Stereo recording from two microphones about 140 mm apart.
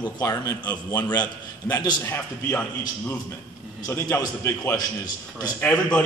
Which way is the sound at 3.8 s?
15° left (ahead or behind).